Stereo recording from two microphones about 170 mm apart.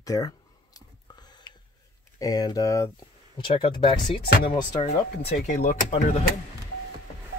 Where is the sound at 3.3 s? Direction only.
30° left (ahead or behind).